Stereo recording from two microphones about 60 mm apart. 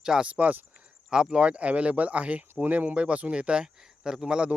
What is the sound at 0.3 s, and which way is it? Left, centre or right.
Speech, right.